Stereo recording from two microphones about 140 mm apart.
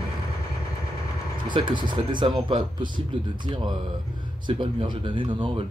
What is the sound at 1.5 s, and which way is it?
Speech, 35° right (ahead or behind).